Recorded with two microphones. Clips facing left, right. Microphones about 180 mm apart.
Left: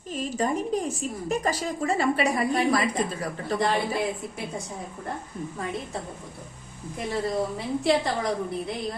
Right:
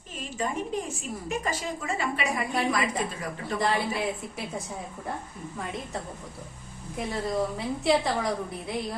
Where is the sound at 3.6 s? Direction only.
Centre (ahead or behind).